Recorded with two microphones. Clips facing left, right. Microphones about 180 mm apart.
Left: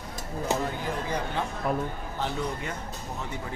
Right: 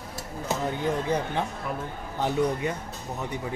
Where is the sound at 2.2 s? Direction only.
20° right (ahead or behind).